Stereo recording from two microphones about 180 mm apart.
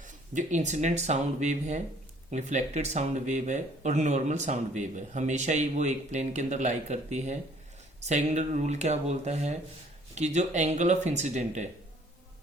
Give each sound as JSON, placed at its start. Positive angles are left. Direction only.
{"t": 0.0, "sound": "speech", "side_deg": -40}